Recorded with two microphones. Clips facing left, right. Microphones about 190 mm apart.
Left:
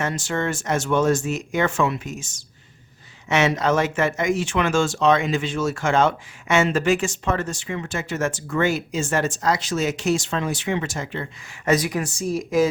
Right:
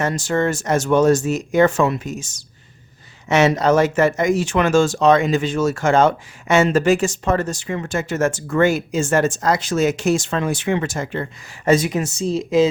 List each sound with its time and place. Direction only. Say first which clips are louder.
0.0 s speech: right 5 dB; 40° right (ahead or behind)
11.6 s speech: right 4 dB; 25° right (ahead or behind)